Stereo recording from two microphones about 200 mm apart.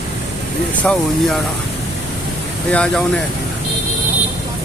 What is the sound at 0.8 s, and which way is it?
Speech, 5° left (ahead or behind).